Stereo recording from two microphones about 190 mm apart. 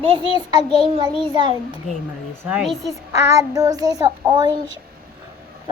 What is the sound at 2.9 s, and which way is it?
A child's voice, 15° right (ahead or behind).